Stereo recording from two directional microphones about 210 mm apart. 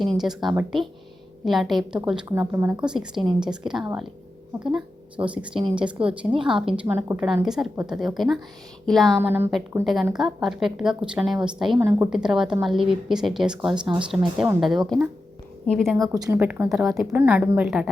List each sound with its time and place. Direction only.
0.2 s a woman's voice: centre (ahead or behind)
5.4 s speech: 20° right (ahead or behind)
5.7 s a woman's voice: 5° right (ahead or behind)
9.1 s a woman's voice: 10° right (ahead or behind)
16.0 s a woman's voice: 15° right (ahead or behind)